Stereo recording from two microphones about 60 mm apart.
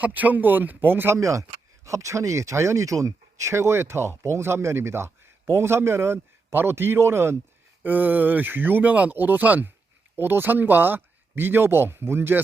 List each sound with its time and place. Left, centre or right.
0.0 s speech: right
1.1 s a man's voice: right
7.9 s speech: right